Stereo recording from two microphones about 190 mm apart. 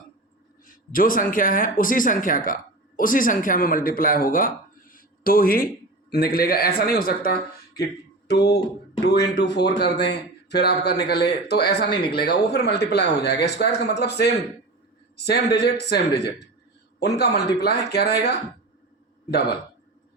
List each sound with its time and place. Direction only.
0.7 s speech: 50° left (ahead or behind)